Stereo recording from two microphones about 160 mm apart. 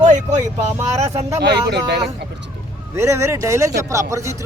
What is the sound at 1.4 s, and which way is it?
Speech, 90° right.